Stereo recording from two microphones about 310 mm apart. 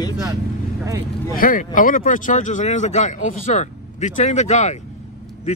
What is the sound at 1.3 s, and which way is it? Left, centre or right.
Speech, left.